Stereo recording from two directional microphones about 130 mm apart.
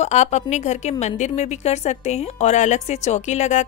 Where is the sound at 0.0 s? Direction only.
60° left (ahead or behind).